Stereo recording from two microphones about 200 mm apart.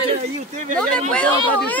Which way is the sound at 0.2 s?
35° right (ahead or behind).